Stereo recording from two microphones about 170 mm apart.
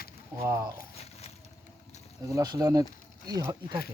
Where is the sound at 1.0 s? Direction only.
40° left (ahead or behind).